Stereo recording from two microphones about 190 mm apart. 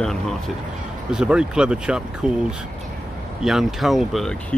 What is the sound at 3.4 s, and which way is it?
Speech, centre (ahead or behind).